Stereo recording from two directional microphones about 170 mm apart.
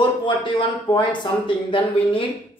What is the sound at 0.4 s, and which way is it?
Speech, 30° left (ahead or behind).